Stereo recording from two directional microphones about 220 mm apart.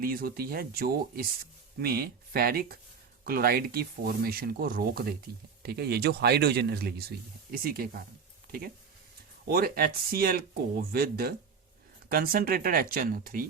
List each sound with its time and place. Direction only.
0.0 s speech: 40° right (ahead or behind)
9.5 s speech: 45° right (ahead or behind)